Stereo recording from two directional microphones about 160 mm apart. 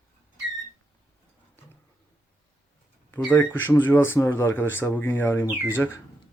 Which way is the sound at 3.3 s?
10° left (ahead or behind).